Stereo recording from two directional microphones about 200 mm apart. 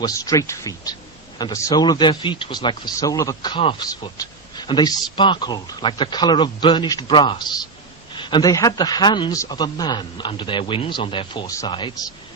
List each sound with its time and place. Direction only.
0.0 s speech: 15° left (ahead or behind)